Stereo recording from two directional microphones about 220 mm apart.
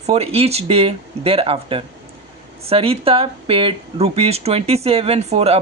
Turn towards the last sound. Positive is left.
turn(degrees=-30)  # may be behind; listen again after turning